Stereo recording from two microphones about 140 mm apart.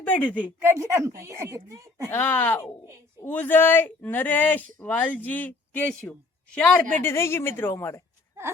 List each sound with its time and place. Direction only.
0.0 s a woman's voice: 10° left (ahead or behind)
0.6 s speech: 20° right (ahead or behind)
2.0 s a woman's voice: 15° left (ahead or behind)
7.0 s a woman's voice: 20° left (ahead or behind)